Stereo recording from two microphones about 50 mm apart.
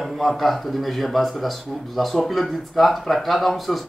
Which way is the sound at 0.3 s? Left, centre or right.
Centre.